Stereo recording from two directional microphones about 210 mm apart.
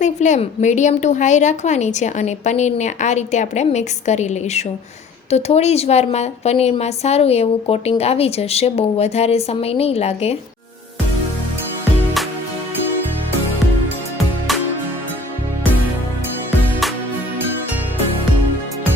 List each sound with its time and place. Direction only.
0.0 s a woman's voice: 35° left (ahead or behind)